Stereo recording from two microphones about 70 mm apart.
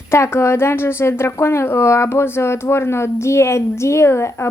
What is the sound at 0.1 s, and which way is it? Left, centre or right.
A woman's voice, left.